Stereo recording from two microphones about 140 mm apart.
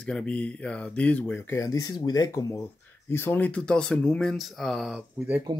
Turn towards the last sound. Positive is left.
turn(degrees=-30)  # may be behind; listen again after turning